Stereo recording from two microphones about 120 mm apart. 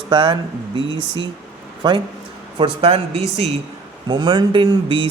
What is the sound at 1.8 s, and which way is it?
A man's voice, 40° right (ahead or behind).